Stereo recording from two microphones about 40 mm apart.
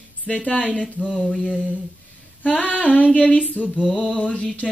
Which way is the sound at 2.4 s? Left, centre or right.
Left.